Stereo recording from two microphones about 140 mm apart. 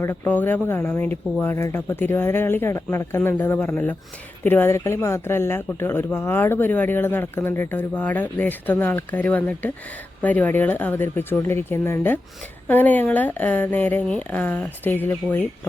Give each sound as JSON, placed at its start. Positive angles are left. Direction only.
{"t": 0.0, "sound": "speech", "side_deg": 15}